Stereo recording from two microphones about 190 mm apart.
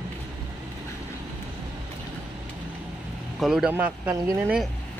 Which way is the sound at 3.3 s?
Centre (ahead or behind).